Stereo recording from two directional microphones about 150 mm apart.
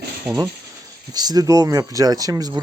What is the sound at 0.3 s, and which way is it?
Speech, 10° right (ahead or behind).